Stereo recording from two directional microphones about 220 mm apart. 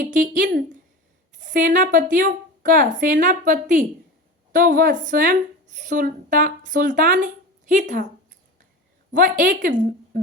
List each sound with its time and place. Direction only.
0.0 s speech: 35° right (ahead or behind)
9.1 s speech: 35° right (ahead or behind)